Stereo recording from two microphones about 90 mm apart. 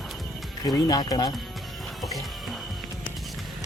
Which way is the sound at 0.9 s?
45° left (ahead or behind).